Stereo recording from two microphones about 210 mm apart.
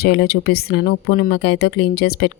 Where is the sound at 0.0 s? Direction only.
50° left (ahead or behind).